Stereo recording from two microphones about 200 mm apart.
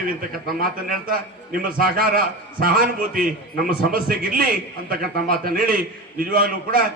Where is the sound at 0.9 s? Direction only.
45° right (ahead or behind).